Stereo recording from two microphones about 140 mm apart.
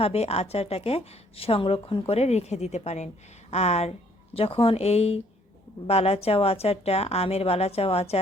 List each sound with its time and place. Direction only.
0.0 s a woman's voice: 45° left (ahead or behind)